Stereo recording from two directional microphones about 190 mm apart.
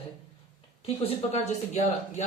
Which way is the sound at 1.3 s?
35° left (ahead or behind).